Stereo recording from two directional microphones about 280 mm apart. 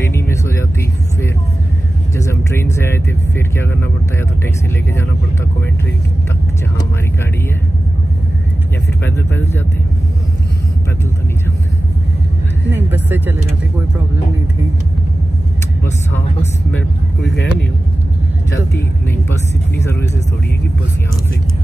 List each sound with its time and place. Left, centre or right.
0.0 s vehicle: centre
2.1 s vehicle: centre
9.0 s a sound: centre
12.6 s vehicle: centre
15.8 s vehicle: centre
17.2 s vehicle: left
19.0 s vehicle: centre